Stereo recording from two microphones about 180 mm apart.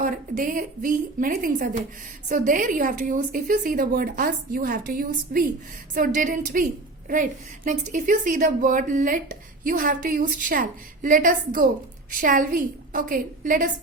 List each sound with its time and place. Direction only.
0.0 s a woman's voice: 50° right (ahead or behind)